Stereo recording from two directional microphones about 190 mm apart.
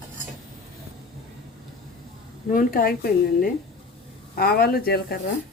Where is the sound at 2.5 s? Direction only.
50° left (ahead or behind).